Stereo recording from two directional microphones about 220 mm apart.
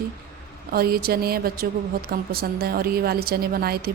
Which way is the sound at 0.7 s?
45° right (ahead or behind).